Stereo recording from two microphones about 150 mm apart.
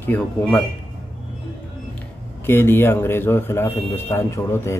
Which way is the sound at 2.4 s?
15° left (ahead or behind).